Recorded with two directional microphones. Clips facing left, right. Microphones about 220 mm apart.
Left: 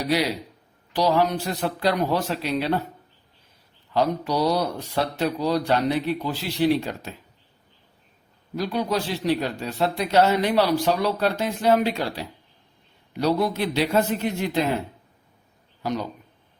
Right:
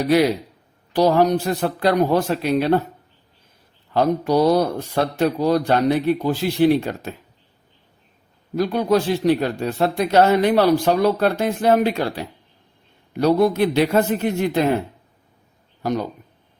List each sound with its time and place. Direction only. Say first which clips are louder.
0.9 s a man's voice: right 5 dB; 50° right (ahead or behind)
3.9 s a man's voice: right 5 dB; 50° right (ahead or behind)
8.5 s a man's voice: right 7 dB; 50° right (ahead or behind)
15.8 s speech: right 4 dB; 50° right (ahead or behind)